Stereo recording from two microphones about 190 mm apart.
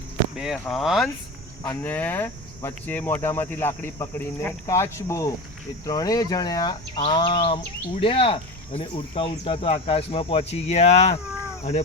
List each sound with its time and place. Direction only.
0.3 s speech: centre (ahead or behind); by 11.1 s 35° left (ahead or behind)